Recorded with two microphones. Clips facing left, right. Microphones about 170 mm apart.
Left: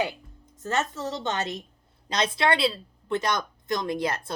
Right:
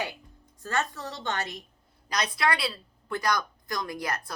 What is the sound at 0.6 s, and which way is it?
A woman's voice, 20° left (ahead or behind).